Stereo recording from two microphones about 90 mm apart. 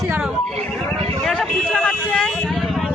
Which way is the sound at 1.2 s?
5° left (ahead or behind).